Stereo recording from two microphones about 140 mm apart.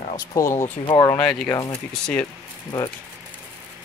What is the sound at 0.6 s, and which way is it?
Speech, 35° left (ahead or behind).